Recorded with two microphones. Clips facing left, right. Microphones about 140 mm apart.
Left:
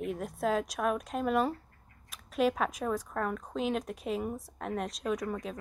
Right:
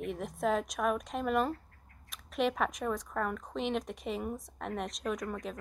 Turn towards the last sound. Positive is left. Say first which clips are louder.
# left 2 dB
turn(degrees=5)  # may be behind; listen again after turning